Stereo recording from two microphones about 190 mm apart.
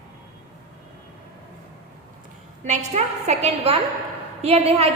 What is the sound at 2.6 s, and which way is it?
A woman's voice, 40° right (ahead or behind).